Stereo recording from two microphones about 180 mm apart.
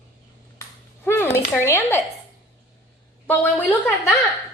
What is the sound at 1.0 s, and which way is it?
Speech, 15° left (ahead or behind).